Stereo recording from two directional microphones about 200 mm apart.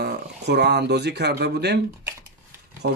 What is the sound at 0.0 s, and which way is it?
Speech, 55° right (ahead or behind).